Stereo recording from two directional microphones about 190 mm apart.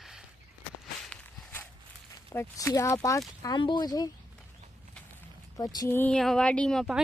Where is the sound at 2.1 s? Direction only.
15° left (ahead or behind).